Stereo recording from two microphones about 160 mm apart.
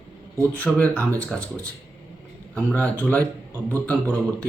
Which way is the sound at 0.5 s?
10° left (ahead or behind).